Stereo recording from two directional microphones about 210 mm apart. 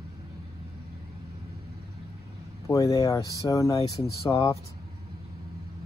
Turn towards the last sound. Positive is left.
turn(degrees=20)  # may be behind; listen again after turning